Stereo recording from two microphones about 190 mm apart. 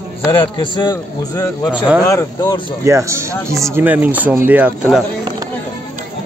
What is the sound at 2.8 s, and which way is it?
Speech, 15° right (ahead or behind).